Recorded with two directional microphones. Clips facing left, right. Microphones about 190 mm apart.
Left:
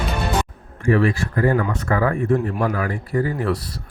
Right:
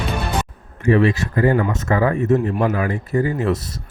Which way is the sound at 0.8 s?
20° right (ahead or behind).